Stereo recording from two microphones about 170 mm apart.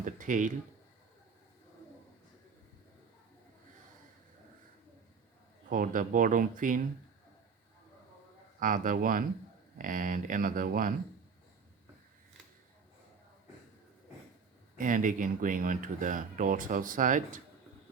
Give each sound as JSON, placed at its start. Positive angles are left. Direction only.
{"t": 0.0, "sound": "a sound", "side_deg": -50}
{"t": 5.6, "sound": "speech", "side_deg": -55}
{"t": 8.5, "sound": "speech", "side_deg": -50}
{"t": 14.8, "sound": "speech", "side_deg": -50}